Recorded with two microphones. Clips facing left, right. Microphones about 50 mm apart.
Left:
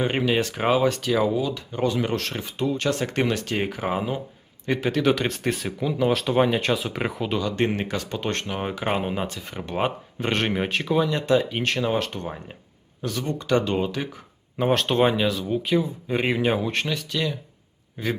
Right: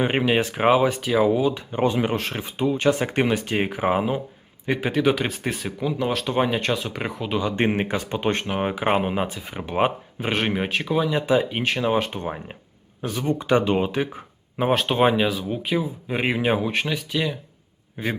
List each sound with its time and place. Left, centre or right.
0.0 s speech: centre
7.3 s speech: right
14.6 s speech: centre